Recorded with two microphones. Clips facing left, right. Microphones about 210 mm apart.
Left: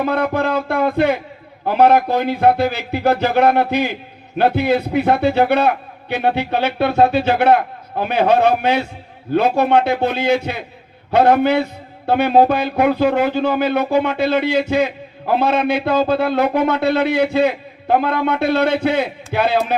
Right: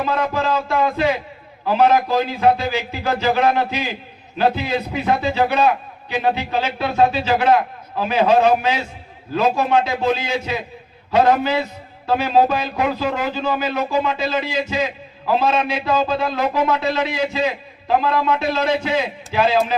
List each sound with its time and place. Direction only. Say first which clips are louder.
0.0 s a man's voice: left 3 dB; 60° left (ahead or behind)